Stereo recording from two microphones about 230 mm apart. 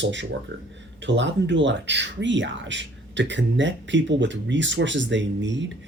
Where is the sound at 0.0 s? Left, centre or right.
Right.